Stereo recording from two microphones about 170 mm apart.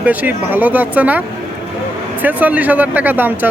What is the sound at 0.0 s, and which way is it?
A man's voice, 10° right (ahead or behind).